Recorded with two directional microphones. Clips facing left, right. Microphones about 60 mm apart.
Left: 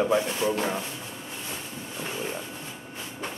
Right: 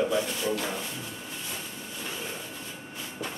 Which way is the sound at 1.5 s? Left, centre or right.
Left.